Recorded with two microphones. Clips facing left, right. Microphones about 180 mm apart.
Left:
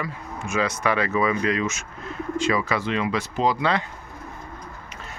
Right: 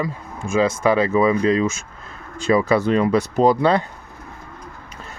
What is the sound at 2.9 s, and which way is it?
Speech, 40° right (ahead or behind).